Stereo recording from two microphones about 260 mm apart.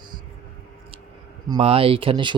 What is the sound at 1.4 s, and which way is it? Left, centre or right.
Speech, centre.